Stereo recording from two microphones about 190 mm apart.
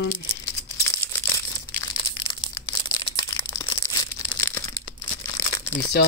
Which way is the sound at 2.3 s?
20° left (ahead or behind).